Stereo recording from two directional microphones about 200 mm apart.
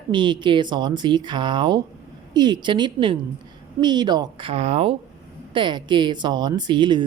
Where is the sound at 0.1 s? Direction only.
25° right (ahead or behind).